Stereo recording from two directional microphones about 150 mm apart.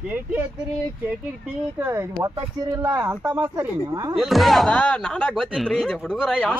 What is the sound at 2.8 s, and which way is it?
Speech, 15° right (ahead or behind).